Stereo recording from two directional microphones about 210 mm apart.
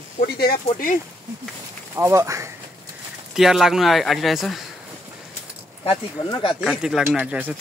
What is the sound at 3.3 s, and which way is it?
Rub, centre (ahead or behind).